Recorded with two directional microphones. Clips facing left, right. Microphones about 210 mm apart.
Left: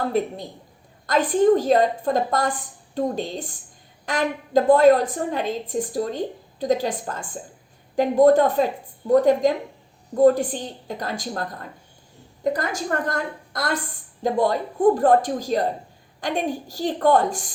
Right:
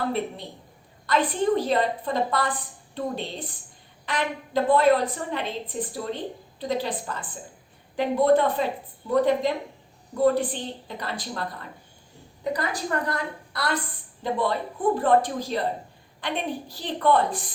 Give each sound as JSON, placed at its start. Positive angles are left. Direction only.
{"t": 1.0, "sound": "a woman's voice", "side_deg": 45}